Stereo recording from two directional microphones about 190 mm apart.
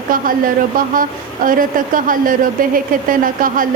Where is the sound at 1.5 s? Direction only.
45° right (ahead or behind).